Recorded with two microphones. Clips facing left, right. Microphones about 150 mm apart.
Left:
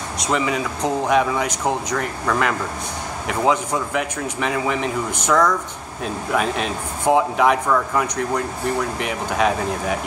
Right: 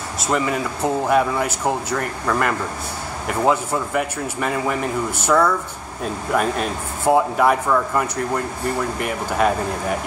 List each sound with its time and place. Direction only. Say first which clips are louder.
0.2 s speech: even; 5° right (ahead or behind)